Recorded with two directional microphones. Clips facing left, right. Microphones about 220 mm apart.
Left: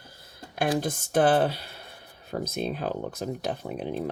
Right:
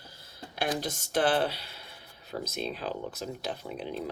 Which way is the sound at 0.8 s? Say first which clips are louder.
Left 6 dB; 50° left (ahead or behind).